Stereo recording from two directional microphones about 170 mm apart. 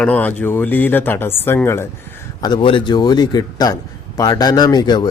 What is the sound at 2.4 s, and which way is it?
Speech, 30° left (ahead or behind).